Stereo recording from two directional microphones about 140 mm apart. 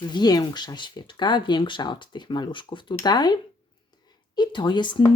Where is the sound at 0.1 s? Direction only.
30° left (ahead or behind).